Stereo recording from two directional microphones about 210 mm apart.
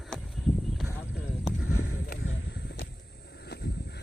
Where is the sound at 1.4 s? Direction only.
70° left (ahead or behind).